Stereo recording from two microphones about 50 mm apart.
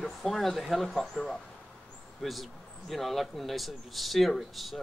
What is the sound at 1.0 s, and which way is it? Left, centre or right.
Speech, centre.